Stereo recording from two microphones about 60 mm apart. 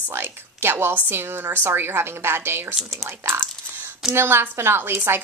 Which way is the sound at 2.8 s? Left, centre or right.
Centre.